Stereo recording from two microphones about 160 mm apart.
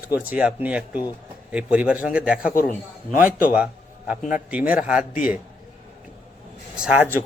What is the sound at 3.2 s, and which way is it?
Speech, 60° left (ahead or behind).